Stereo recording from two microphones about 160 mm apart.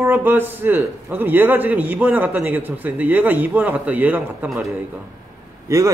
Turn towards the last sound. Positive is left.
turn(degrees=-15)  # may be behind; listen again after turning